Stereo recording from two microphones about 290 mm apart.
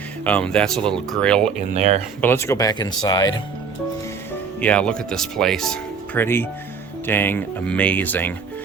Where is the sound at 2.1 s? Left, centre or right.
Centre.